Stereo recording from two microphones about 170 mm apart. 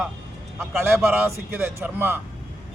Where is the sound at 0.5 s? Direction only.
15° right (ahead or behind).